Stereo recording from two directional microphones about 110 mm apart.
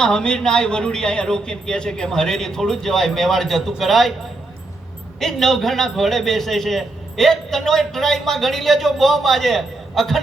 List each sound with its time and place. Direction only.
0.0 s a man's voice: 5° left (ahead or behind)
5.2 s a man's voice: 5° left (ahead or behind)